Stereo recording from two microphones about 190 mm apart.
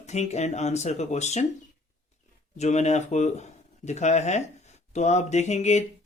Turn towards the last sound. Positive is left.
turn(degrees=35)  # may be behind; listen again after turning